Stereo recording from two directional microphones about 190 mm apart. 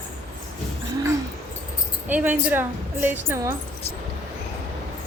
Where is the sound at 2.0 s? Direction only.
10° right (ahead or behind).